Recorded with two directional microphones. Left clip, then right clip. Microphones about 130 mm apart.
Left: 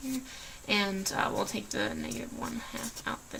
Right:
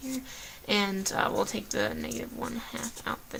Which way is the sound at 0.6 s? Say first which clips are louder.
Right 2 dB; 50° right (ahead or behind).